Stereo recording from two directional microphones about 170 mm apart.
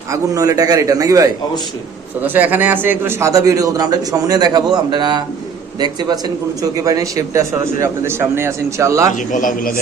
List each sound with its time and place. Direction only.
0.1 s a man's voice: 20° right (ahead or behind)
9.1 s a man's voice: 50° left (ahead or behind)